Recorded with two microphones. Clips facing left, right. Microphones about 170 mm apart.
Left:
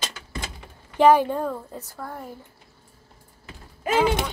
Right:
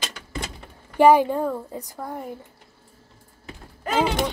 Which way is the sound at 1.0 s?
10° right (ahead or behind).